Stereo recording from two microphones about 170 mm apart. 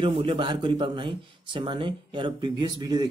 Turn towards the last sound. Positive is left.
turn(degrees=-25)  # may be behind; listen again after turning